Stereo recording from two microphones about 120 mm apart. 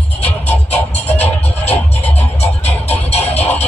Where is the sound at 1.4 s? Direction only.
60° left (ahead or behind).